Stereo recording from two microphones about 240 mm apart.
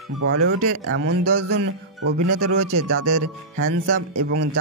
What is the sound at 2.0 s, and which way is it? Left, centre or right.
Speech, right.